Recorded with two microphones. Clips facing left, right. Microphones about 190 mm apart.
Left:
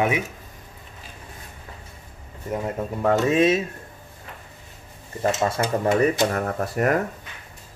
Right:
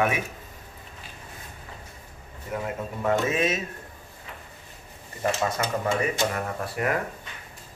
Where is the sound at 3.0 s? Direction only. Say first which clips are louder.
Left 6 dB; 35° left (ahead or behind).